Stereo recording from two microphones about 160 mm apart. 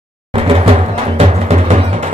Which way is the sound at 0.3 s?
35° right (ahead or behind).